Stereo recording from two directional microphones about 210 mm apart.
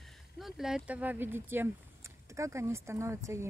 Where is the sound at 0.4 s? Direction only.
Centre (ahead or behind).